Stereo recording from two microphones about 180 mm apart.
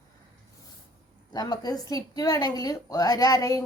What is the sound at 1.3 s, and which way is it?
A woman's voice, 20° left (ahead or behind).